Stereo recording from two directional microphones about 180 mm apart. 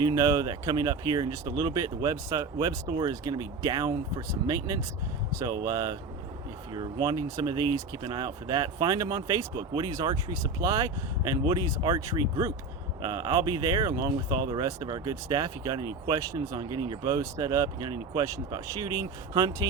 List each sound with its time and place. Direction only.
0.0 s speech: 20° right (ahead or behind)